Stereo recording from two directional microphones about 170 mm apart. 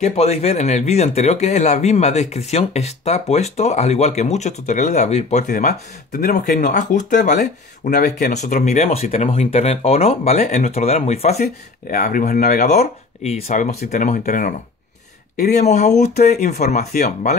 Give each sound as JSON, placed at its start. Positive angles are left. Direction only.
{"t": 0.0, "sound": "speech", "side_deg": 40}
{"t": 5.5, "sound": "speech", "side_deg": 60}
{"t": 11.4, "sound": "speech", "side_deg": 60}
{"t": 12.6, "sound": "speech", "side_deg": 40}
{"t": 15.3, "sound": "speech", "side_deg": 65}
{"t": 15.6, "sound": "speech", "side_deg": 45}